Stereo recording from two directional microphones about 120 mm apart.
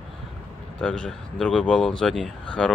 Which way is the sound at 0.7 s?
10° left (ahead or behind).